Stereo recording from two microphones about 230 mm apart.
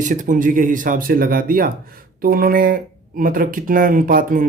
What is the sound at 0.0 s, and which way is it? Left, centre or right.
Speech, right.